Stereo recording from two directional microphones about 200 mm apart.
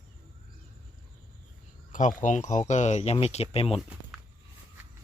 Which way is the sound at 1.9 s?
40° left (ahead or behind).